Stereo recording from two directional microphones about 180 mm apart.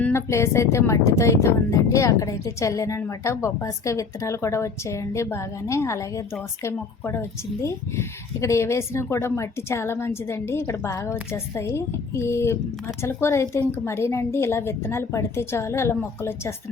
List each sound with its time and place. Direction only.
0.0 s speech: 15° left (ahead or behind)